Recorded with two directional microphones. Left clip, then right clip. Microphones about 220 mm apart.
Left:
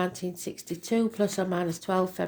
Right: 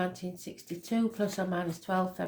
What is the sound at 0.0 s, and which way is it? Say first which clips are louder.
Speech: left 4 dB; 40° left (ahead or behind).